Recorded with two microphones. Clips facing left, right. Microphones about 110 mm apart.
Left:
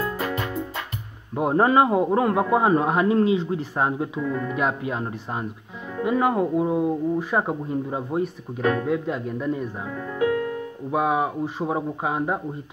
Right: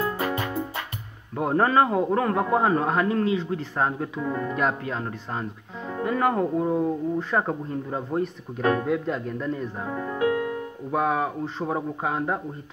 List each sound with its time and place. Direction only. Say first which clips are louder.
0.0 s music: even; 30° right (ahead or behind)
1.3 s a man's voice: left 2 dB; 15° left (ahead or behind)
4.2 s speech: right 2 dB; 35° right (ahead or behind)
4.6 s a man's voice: left 1 dB; 10° left (ahead or behind)
9.8 s speech: even; 35° right (ahead or behind)
10.9 s a man's voice: left 2 dB; 10° left (ahead or behind)